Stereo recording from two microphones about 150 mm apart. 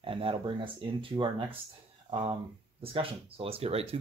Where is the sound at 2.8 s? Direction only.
40° right (ahead or behind).